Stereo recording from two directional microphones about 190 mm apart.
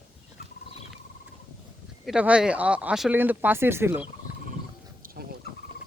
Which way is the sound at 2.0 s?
5° right (ahead or behind).